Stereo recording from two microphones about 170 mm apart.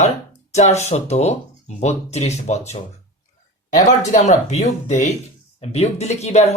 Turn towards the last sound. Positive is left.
turn(degrees=40)  # may be behind; listen again after turning